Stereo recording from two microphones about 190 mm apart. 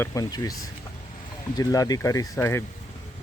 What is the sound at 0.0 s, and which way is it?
Speech, 20° left (ahead or behind).